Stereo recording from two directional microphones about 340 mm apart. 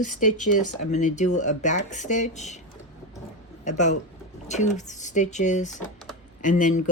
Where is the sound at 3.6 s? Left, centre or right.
Left.